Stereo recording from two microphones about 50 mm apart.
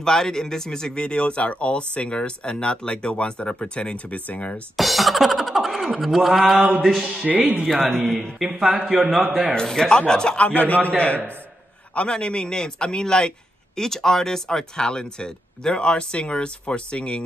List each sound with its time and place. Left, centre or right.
0.0 s speech: centre; by 4.6 s left
4.7 s a man's voice: centre
7.2 s speech: right
7.6 s speech: centre
8.5 s a man's voice: centre
9.5 s speech: centre